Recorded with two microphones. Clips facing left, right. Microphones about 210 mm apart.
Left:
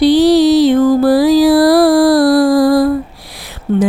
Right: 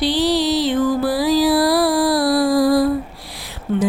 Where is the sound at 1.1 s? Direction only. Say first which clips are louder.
Left 7 dB; 75° left (ahead or behind).